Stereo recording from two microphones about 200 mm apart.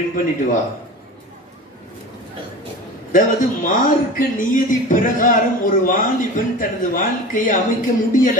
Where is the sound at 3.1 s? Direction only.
40° left (ahead or behind).